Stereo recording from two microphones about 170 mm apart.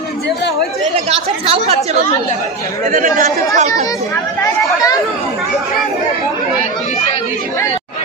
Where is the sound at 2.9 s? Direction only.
50° right (ahead or behind).